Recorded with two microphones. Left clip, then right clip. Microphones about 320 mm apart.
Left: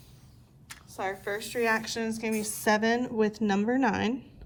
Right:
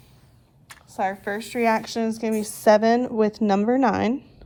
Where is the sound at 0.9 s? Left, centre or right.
Right.